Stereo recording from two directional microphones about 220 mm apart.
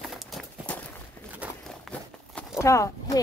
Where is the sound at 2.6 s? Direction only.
15° left (ahead or behind).